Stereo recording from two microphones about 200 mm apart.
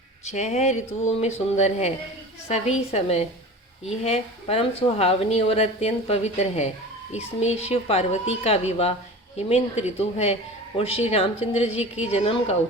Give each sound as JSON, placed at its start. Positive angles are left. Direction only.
{"t": 0.3, "sound": "speech", "side_deg": 35}